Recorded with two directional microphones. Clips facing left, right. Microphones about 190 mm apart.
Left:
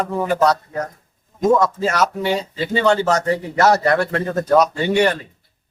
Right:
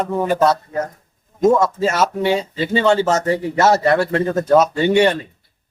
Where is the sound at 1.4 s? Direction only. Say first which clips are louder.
Right 2 dB; 25° right (ahead or behind).